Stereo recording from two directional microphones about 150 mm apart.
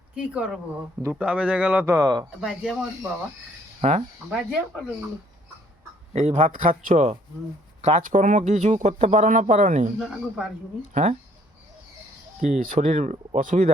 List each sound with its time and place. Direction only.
0.2 s speech: 5° right (ahead or behind); by 2.2 s 25° right (ahead or behind)
2.4 s speech: 5° right (ahead or behind)
3.8 s speech: 45° right (ahead or behind)
4.3 s speech: 5° right (ahead or behind)
6.1 s speech: 55° right (ahead or behind)
10.0 s speech: 5° right (ahead or behind)
10.9 s speech: 45° right (ahead or behind)
12.4 s speech: 60° right (ahead or behind)